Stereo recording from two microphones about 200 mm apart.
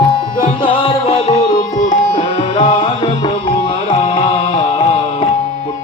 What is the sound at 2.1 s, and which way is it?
Music, 30° left (ahead or behind).